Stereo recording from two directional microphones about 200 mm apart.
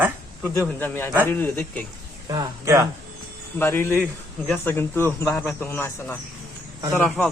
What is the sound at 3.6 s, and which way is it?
A man's voice, 10° left (ahead or behind).